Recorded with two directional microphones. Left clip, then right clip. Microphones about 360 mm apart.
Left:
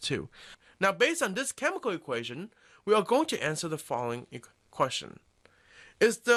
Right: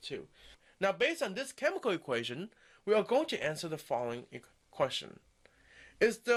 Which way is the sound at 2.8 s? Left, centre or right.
Centre.